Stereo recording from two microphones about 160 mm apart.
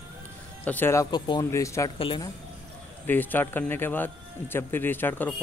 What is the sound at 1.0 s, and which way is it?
Speech, 30° left (ahead or behind).